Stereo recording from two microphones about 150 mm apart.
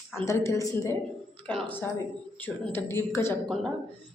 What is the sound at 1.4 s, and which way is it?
Speech, 10° left (ahead or behind).